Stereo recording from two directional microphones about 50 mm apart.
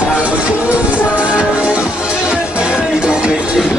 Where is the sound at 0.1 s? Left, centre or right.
Right.